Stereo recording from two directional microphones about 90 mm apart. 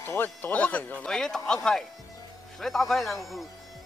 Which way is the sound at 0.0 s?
25° left (ahead or behind).